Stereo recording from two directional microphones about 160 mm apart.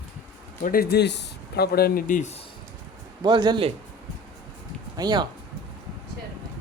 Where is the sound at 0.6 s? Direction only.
70° left (ahead or behind); by 2.3 s 55° left (ahead or behind).